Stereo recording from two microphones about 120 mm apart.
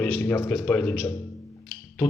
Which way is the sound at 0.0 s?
20° left (ahead or behind).